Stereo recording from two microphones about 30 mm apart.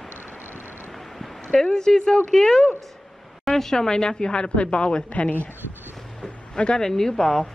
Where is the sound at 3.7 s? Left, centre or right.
Left.